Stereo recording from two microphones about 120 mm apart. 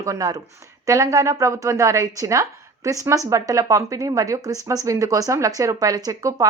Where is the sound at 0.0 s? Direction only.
30° right (ahead or behind).